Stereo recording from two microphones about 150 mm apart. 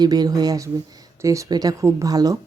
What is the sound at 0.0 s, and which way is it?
A woman's voice, 25° right (ahead or behind).